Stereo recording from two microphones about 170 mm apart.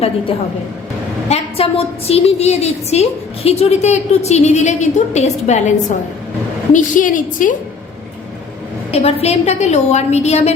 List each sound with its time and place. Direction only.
1.3 s a woman's voice: 35° left (ahead or behind)
6.7 s a woman's voice: 50° left (ahead or behind)
8.9 s a woman's voice: 35° left (ahead or behind)